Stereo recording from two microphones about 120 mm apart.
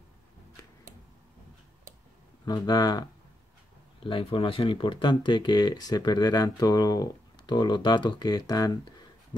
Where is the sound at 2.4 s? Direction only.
35° left (ahead or behind).